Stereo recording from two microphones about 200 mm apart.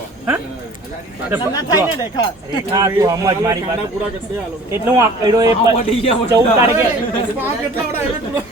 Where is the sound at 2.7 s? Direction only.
15° right (ahead or behind).